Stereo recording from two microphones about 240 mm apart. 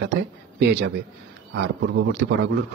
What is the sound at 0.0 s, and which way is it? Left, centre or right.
A man's voice, right.